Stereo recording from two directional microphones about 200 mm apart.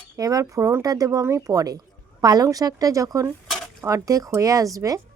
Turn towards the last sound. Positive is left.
turn(degrees=-15)  # may be behind; listen again after turning